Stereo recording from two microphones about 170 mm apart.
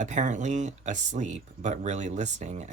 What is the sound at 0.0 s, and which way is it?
Speech, 45° right (ahead or behind).